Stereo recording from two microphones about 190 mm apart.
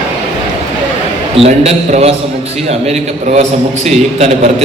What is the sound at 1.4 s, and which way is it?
A man's voice, 35° right (ahead or behind).